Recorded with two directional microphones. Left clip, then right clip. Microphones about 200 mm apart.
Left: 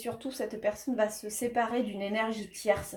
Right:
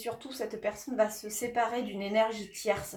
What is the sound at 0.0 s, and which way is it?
Speech, 40° left (ahead or behind).